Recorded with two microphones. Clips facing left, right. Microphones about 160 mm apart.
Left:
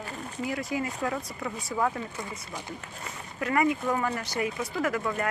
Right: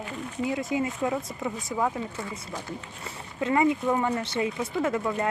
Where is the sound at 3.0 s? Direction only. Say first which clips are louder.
Right 3 dB; 25° right (ahead or behind).